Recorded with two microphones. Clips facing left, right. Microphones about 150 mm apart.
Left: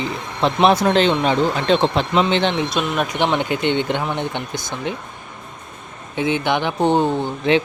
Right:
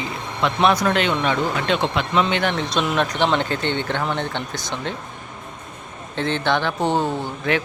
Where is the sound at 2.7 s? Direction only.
5° left (ahead or behind).